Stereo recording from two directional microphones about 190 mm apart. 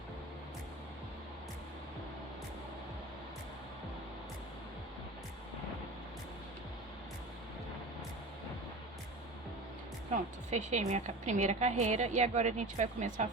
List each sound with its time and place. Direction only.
10.1 s a woman's voice: 40° right (ahead or behind)